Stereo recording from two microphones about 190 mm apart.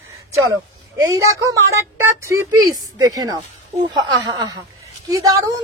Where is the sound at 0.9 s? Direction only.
15° right (ahead or behind).